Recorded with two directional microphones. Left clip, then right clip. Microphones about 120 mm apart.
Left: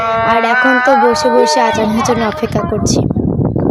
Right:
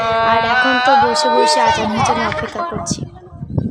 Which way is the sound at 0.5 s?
5° right (ahead or behind).